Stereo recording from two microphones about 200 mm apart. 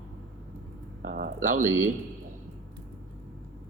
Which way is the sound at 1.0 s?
45° right (ahead or behind).